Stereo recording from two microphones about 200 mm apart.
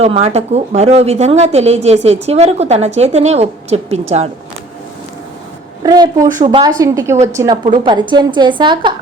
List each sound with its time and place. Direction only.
0.0 s a woman's voice: 30° right (ahead or behind)
5.8 s a woman's voice: 20° right (ahead or behind)